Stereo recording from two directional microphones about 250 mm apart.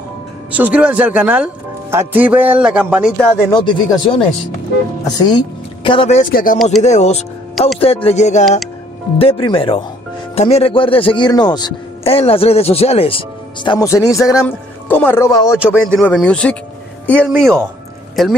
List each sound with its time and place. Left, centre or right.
0.5 s speech: centre
3.2 s speech: centre
5.9 s speech: left
13.7 s speech: centre
15.6 s speech: centre
17.3 s speech: centre